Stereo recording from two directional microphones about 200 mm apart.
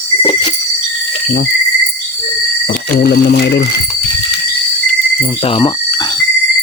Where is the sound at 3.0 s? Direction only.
55° left (ahead or behind).